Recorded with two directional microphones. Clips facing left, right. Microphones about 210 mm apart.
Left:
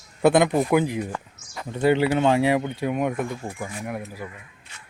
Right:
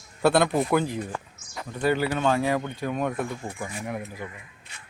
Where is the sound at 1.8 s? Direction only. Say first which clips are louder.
Left 5 dB; 25° left (ahead or behind).